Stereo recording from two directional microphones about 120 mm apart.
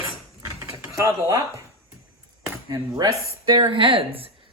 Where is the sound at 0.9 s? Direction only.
30° right (ahead or behind).